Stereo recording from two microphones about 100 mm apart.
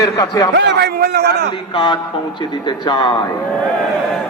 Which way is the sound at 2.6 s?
50° left (ahead or behind).